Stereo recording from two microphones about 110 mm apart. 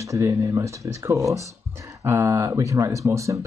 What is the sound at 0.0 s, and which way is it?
Speech, 30° right (ahead or behind).